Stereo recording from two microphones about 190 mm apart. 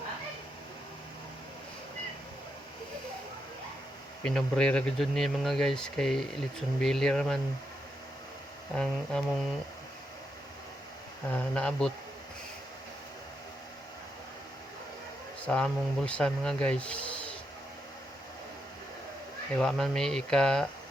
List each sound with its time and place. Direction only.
4.2 s speech: 5° left (ahead or behind)
8.7 s speech: 5° left (ahead or behind)
11.3 s speech: 5° left (ahead or behind)
15.4 s speech: 5° left (ahead or behind)
19.5 s speech: centre (ahead or behind)